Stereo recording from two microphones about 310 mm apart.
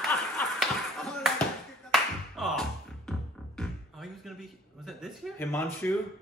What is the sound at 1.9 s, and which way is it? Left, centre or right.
Clapping, centre.